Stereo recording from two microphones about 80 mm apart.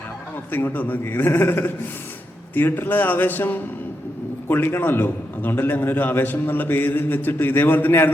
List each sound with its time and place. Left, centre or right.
0.5 s a man's voice: left